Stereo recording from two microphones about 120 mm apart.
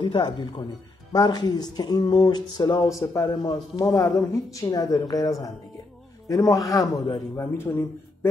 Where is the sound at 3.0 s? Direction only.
25° left (ahead or behind).